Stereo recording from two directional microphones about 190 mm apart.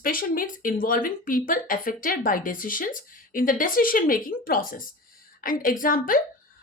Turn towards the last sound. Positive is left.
turn(degrees=45)  # may be behind; listen again after turning